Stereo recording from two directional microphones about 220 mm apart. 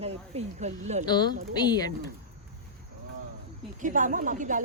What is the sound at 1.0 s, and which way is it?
Speech, 20° left (ahead or behind).